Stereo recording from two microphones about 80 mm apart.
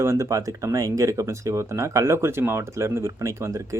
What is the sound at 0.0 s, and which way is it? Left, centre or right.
Speech, right.